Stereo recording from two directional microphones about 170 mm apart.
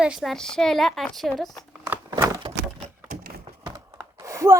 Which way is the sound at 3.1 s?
60° right (ahead or behind).